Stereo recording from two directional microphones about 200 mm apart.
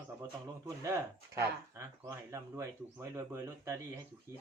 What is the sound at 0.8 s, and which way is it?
Speech, 15° right (ahead or behind).